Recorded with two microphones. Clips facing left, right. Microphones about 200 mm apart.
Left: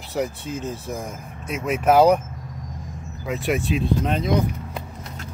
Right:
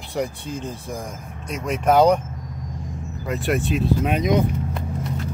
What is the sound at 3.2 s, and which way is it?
Speech, centre (ahead or behind).